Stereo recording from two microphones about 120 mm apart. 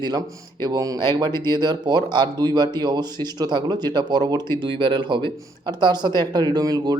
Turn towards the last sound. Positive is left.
turn(degrees=-35)  # may be behind; listen again after turning